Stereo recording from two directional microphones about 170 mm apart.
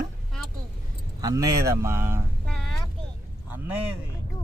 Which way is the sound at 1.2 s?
20° right (ahead or behind).